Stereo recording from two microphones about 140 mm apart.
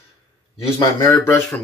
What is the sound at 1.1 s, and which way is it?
Speech, 20° left (ahead or behind).